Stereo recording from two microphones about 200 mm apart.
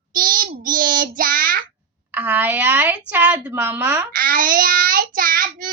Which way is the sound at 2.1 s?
5° right (ahead or behind).